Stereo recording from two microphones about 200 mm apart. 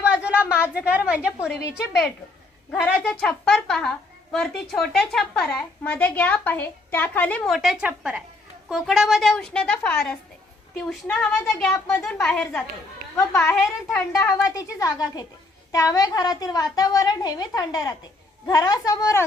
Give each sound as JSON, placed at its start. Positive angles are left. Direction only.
{"t": 0.0, "sound": "a sound", "side_deg": -5}
{"t": 0.6, "sound": "a woman's voice", "side_deg": -5}
{"t": 2.8, "sound": "a woman's voice", "side_deg": 5}